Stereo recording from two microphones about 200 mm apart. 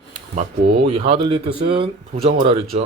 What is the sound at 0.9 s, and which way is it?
Speech, 30° right (ahead or behind).